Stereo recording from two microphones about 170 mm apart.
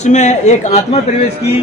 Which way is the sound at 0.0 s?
45° left (ahead or behind).